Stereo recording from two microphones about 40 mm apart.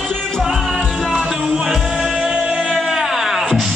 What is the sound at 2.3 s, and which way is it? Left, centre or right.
Music, centre.